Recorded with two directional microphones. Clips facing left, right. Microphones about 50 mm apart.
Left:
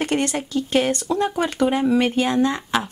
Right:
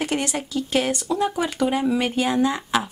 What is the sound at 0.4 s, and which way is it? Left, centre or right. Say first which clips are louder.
A woman's voice: left 3 dB; centre.